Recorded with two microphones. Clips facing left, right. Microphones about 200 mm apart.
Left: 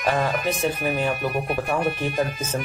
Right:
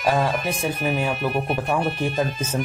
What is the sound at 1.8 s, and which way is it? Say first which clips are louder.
Speech: even; 10° left (ahead or behind).